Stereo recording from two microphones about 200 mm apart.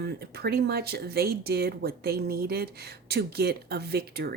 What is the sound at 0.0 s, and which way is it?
Speech, 55° right (ahead or behind).